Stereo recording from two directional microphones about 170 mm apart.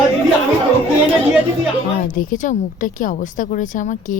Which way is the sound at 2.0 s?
50° left (ahead or behind).